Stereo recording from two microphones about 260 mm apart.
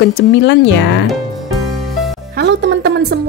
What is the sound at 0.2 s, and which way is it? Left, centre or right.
Speech, left.